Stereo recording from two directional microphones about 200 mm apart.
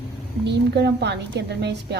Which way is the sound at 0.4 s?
55° right (ahead or behind).